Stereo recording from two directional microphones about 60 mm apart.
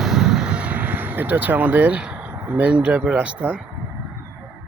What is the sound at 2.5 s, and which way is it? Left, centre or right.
Speech, right.